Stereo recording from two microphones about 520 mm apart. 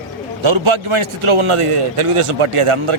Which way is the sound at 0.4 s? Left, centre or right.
Right.